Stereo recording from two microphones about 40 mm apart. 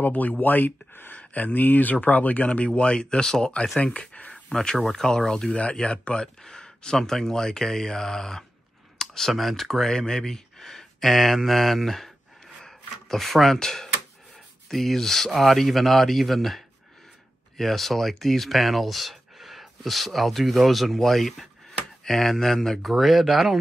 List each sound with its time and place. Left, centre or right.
0.1 s speech: left
1.1 s speech: left
2.4 s speech: left; by 5.5 s centre
5.5 s speech: left; by 8.5 s centre
8.9 s a sound: centre
9.3 s speech: centre
12.6 s a sound: centre
13.6 s speech: centre